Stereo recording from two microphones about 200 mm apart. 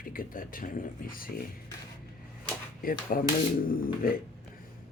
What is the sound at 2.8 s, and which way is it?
Speech, 45° left (ahead or behind).